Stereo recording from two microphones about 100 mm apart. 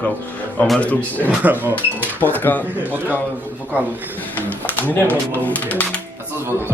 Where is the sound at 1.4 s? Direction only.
15° right (ahead or behind).